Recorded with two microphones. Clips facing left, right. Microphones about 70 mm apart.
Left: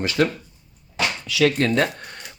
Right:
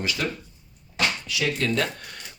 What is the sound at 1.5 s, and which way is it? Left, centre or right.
Speech, left.